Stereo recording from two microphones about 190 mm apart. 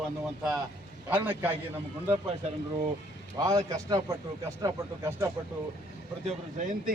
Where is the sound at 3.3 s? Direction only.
15° right (ahead or behind).